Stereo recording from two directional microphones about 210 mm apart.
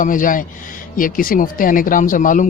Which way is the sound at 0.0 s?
40° left (ahead or behind).